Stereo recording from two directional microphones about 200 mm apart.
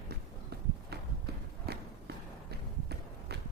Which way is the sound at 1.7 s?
55° right (ahead or behind).